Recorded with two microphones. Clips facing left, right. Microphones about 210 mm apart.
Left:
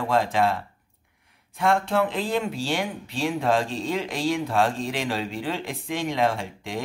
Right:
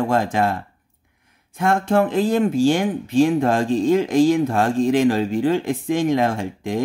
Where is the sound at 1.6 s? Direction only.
45° right (ahead or behind).